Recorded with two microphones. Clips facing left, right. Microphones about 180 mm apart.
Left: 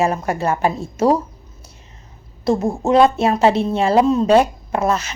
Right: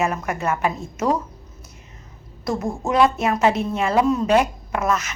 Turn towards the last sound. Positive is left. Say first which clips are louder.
# left 3 dB
turn(degrees=30)  # may be behind; listen again after turning